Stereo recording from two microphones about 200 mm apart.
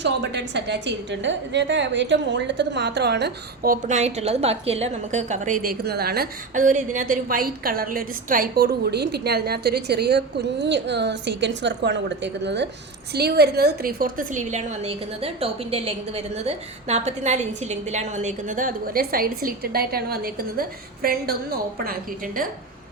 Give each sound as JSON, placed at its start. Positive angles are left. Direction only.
{"t": 0.0, "sound": "a woman's voice", "side_deg": -60}